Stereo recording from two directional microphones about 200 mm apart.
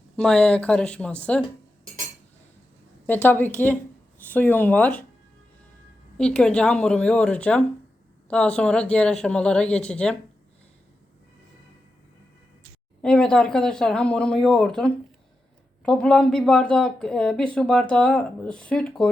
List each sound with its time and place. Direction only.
0.2 s speech: 5° left (ahead or behind)
3.1 s speech: 10° left (ahead or behind)
6.1 s speech: 5° left (ahead or behind)
13.0 s speech: 5° left (ahead or behind)